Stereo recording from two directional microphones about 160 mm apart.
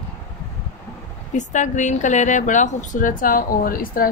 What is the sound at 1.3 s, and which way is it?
A woman's voice, 50° left (ahead or behind).